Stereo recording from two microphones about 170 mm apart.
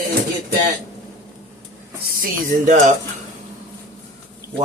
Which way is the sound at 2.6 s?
50° right (ahead or behind).